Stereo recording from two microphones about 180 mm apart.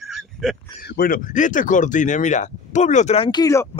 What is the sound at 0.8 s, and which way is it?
Speech, 60° left (ahead or behind).